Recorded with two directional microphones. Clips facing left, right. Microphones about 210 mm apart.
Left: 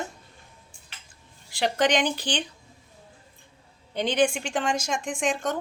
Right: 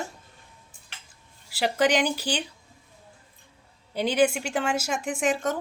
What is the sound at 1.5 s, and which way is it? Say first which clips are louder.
Speech: even; 5° right (ahead or behind).